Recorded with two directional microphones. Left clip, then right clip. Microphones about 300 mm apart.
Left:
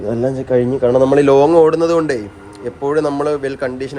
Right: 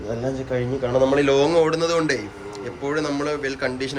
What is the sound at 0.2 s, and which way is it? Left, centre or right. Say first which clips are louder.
A man's voice: left 11 dB; centre.